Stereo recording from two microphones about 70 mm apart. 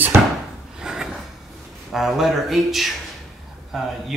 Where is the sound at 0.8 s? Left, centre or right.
Centre.